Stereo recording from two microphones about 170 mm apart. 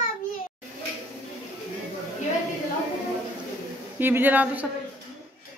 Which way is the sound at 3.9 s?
10° right (ahead or behind).